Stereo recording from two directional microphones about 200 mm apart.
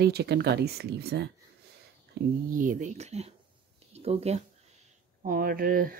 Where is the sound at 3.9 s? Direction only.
30° right (ahead or behind).